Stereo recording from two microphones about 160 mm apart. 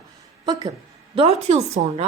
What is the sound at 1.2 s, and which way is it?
Speech, 40° right (ahead or behind).